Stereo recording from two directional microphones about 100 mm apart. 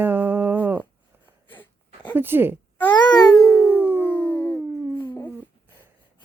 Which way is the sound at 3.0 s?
40° left (ahead or behind).